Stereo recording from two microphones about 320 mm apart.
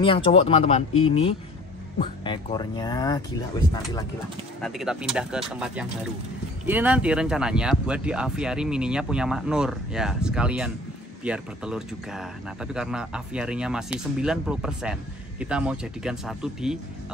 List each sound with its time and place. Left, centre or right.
0.0 s speech: centre
4.6 s speech: centre